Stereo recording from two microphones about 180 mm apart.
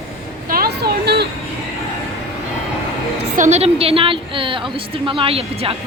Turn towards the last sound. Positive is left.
turn(degrees=-30)  # may be behind; listen again after turning